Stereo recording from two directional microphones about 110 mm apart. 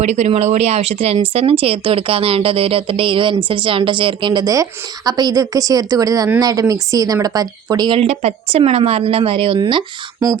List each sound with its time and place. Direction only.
0.0 s speech: 90° right; by 4.5 s 45° right (ahead or behind)
4.5 s a woman's voice: 35° right (ahead or behind)
7.9 s speech: 65° right (ahead or behind)
9.6 s speech: 45° right (ahead or behind)